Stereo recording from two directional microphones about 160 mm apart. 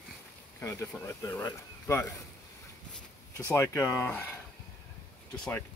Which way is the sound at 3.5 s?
15° left (ahead or behind).